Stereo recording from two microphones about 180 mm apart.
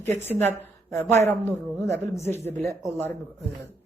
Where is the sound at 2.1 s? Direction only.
15° left (ahead or behind).